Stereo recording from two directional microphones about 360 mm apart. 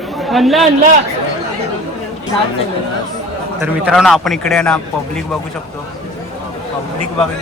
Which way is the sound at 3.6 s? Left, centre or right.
Centre.